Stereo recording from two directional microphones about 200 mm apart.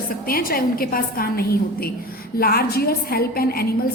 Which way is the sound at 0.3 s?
45° left (ahead or behind).